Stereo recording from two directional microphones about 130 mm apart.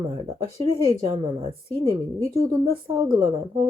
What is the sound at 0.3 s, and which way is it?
Speech, 50° right (ahead or behind).